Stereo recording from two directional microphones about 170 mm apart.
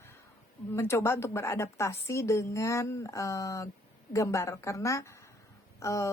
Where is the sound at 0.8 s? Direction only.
15° left (ahead or behind).